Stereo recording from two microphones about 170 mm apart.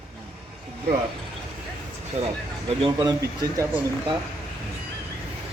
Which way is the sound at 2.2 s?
40° right (ahead or behind).